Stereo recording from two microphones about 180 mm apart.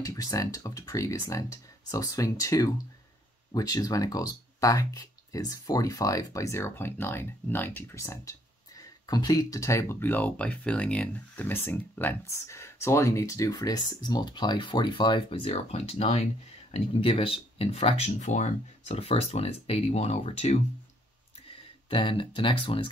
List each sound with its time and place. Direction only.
0.0 s speech: 20° left (ahead or behind); by 20.5 s 35° left (ahead or behind)
21.8 s speech: 30° left (ahead or behind)